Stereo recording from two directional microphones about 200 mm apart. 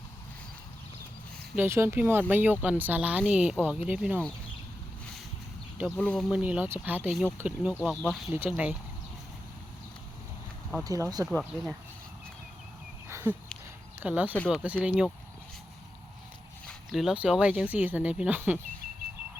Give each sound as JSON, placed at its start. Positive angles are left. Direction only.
{"t": 1.5, "sound": "speech", "side_deg": -10}
{"t": 6.0, "sound": "speech", "side_deg": 5}
{"t": 10.8, "sound": "speech", "side_deg": -15}
{"t": 11.3, "sound": "speech", "side_deg": 0}
{"t": 13.1, "sound": "a sound", "side_deg": -10}
{"t": 14.0, "sound": "speech", "side_deg": -10}
{"t": 14.3, "sound": "speech", "side_deg": 5}
{"t": 14.6, "sound": "speech", "side_deg": -5}
{"t": 16.6, "sound": "speech", "side_deg": 0}